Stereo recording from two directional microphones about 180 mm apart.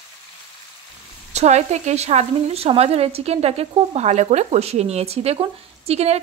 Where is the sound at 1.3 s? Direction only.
40° right (ahead or behind).